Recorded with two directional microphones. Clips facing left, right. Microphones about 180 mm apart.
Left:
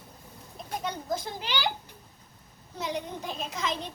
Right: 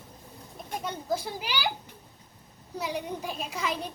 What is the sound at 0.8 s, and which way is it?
Speech, 5° right (ahead or behind).